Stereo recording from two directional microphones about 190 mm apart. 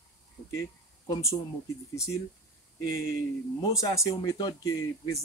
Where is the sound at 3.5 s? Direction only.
15° left (ahead or behind).